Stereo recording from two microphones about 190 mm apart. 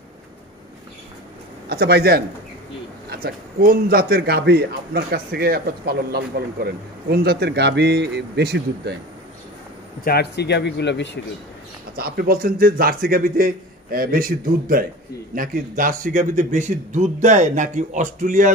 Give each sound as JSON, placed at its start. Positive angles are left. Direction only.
{"t": 1.7, "sound": "a man's voice", "side_deg": -60}
{"t": 10.0, "sound": "speech", "side_deg": 60}
{"t": 12.0, "sound": "a man's voice", "side_deg": -50}